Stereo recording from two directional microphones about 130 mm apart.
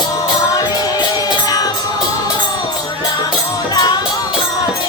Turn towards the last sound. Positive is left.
turn(degrees=30)  # may be behind; listen again after turning